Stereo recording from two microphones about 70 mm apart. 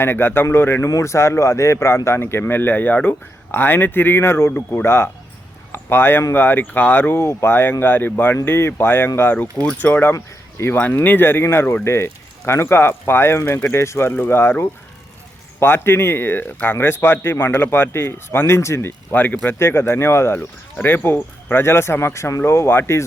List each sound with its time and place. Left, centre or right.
0.0 s speech: left
0.9 s speech: left
19.1 s speech: left
19.5 s speech: left